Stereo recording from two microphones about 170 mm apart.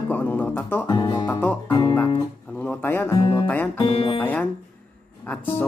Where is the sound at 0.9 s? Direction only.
25° left (ahead or behind).